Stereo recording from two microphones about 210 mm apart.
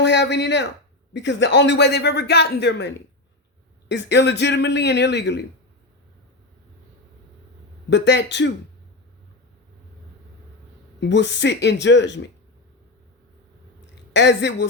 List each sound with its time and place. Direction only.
0.0 s speech: 55° left (ahead or behind)
7.9 s speech: 55° left (ahead or behind)
11.0 s speech: 55° left (ahead or behind)
14.1 s speech: 55° left (ahead or behind)